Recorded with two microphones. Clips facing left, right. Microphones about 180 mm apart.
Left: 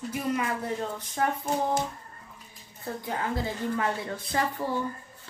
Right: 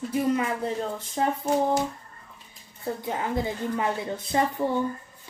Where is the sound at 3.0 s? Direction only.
20° right (ahead or behind).